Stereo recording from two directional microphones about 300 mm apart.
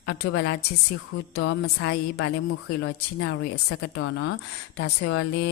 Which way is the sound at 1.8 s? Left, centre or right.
Left.